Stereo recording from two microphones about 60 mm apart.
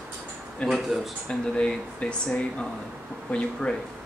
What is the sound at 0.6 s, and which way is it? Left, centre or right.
Speech, centre.